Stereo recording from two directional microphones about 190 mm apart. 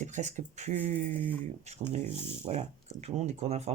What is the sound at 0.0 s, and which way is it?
Speech, 35° right (ahead or behind).